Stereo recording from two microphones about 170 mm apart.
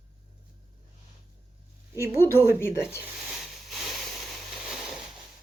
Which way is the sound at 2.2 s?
15° left (ahead or behind).